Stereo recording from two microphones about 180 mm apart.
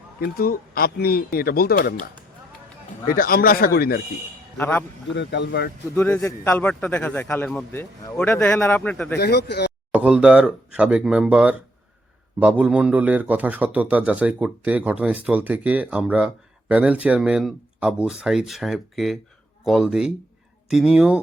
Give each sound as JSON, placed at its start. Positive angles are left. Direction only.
{"t": 0.2, "sound": "speech", "side_deg": 55}
{"t": 3.1, "sound": "speech", "side_deg": 55}
{"t": 4.5, "sound": "speech", "side_deg": 10}
{"t": 5.1, "sound": "speech", "side_deg": 75}
{"t": 5.9, "sound": "a man's voice", "side_deg": 10}
{"t": 9.1, "sound": "speech", "side_deg": 65}
{"t": 9.9, "sound": "a man's voice", "side_deg": -5}